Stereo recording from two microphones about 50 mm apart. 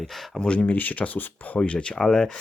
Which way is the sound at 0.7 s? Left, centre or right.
Left.